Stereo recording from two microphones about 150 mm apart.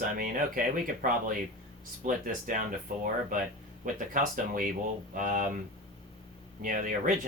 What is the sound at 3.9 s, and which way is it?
Speech, 60° right (ahead or behind).